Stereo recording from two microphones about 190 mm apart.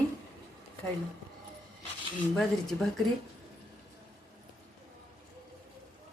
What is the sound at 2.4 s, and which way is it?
Speech, centre (ahead or behind).